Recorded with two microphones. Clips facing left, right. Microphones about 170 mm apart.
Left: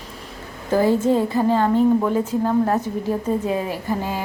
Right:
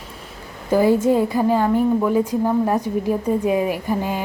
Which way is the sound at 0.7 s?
10° right (ahead or behind).